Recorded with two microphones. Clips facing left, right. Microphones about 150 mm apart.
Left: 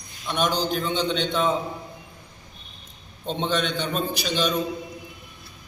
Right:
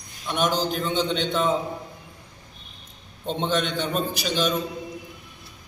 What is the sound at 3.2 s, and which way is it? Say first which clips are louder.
A man's voice: even; 5° right (ahead or behind).